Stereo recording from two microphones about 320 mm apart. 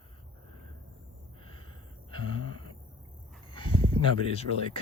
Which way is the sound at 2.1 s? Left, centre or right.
Centre.